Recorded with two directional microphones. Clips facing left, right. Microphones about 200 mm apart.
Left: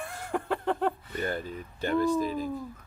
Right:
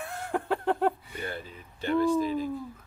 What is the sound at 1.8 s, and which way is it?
Speech, 45° left (ahead or behind).